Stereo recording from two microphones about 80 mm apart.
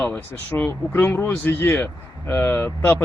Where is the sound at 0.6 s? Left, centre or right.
Left.